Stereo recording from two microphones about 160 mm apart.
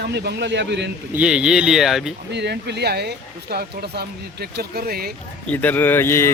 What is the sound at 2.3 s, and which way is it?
Speech, 90° right.